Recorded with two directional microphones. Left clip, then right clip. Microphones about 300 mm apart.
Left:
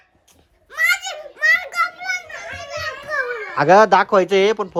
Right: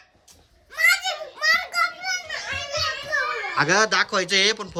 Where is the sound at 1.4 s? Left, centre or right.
Centre.